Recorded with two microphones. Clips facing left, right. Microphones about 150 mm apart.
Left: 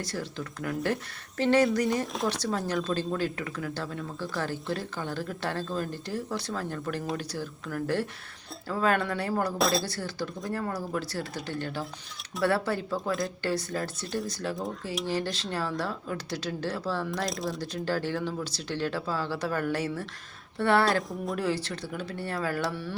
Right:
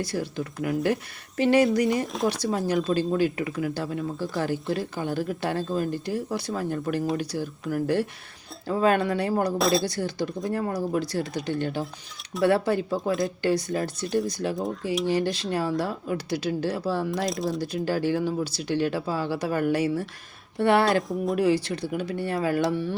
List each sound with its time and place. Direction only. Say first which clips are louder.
0.0 s speech: right 5 dB; 15° right (ahead or behind)
4.6 s speech: right 5 dB; centre (ahead or behind)
4.9 s speech: right 6 dB; 15° right (ahead or behind)
9.6 s speech: right 3 dB; centre (ahead or behind)
9.8 s speech: right 6 dB; 15° right (ahead or behind)
14.5 s speech: right 5 dB; centre (ahead or behind)
15.0 s speech: right 5 dB; 15° right (ahead or behind)
17.2 s speech: right 5 dB; centre (ahead or behind)
17.6 s speech: right 4 dB; 15° right (ahead or behind)